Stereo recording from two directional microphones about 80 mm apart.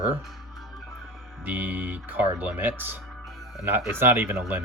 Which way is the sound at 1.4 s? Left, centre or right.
Right.